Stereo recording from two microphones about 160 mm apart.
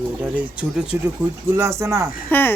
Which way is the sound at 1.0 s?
15° right (ahead or behind).